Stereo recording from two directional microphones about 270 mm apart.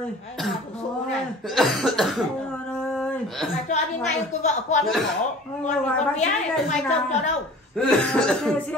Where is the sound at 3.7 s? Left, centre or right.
Left.